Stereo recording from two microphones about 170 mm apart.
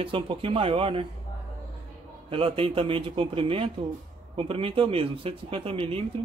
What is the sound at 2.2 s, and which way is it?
Speech, 35° right (ahead or behind).